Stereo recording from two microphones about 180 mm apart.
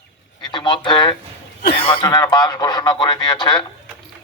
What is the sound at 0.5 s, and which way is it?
Speech, 25° left (ahead or behind).